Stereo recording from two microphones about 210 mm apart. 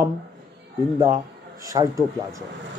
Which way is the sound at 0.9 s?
15° right (ahead or behind).